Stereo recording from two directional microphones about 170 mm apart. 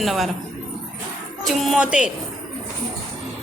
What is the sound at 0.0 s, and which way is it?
Speech, centre (ahead or behind).